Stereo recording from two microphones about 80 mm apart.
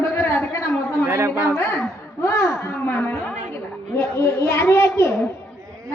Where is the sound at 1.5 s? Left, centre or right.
Left.